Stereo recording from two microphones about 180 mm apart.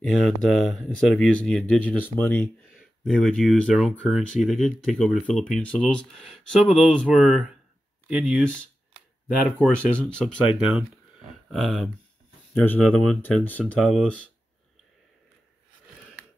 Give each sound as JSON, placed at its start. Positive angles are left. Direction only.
{"t": 0.0, "sound": "speech", "side_deg": 0}
{"t": 2.4, "sound": "a sound", "side_deg": 50}
{"t": 3.1, "sound": "speech", "side_deg": 0}
{"t": 9.6, "sound": "speech", "side_deg": 5}